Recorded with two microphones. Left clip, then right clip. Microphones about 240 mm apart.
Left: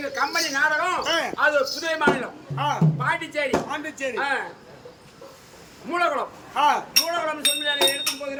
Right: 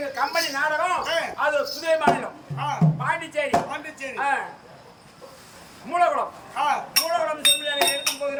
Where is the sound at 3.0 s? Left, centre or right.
Centre.